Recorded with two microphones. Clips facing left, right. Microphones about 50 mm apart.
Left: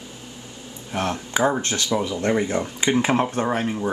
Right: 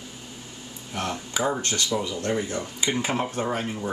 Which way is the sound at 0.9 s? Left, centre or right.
Left.